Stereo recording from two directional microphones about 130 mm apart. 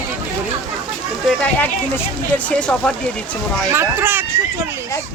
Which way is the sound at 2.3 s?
10° left (ahead or behind).